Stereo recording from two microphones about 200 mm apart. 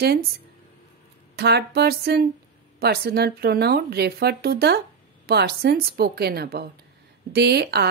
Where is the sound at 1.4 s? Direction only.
55° right (ahead or behind).